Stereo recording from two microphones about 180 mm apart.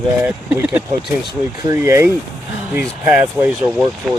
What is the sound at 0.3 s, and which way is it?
Speech, 10° right (ahead or behind).